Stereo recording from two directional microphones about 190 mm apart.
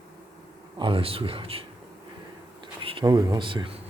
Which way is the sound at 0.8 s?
25° right (ahead or behind).